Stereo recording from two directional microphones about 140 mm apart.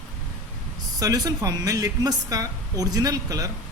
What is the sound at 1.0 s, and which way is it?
A woman's voice, 25° right (ahead or behind).